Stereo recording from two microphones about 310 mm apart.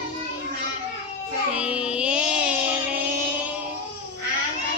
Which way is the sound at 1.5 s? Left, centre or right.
Centre.